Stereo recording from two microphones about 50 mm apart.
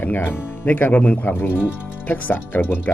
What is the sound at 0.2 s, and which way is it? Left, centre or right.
Speech, left.